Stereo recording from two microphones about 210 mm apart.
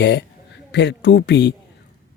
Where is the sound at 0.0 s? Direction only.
55° left (ahead or behind).